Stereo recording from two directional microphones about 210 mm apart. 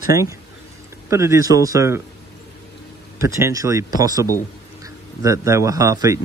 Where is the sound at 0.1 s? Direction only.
15° right (ahead or behind).